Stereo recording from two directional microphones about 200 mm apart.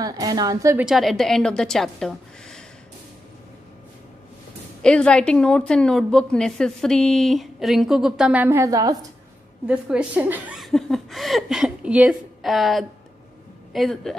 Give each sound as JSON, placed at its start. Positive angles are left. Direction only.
{"t": 0.0, "sound": "a woman's voice", "side_deg": -20}
{"t": 0.8, "sound": "a woman's voice", "side_deg": 0}
{"t": 4.8, "sound": "a woman's voice", "side_deg": 5}
{"t": 9.7, "sound": "a woman's voice", "side_deg": -5}